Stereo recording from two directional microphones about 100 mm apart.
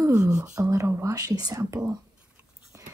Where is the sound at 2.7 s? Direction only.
30° right (ahead or behind).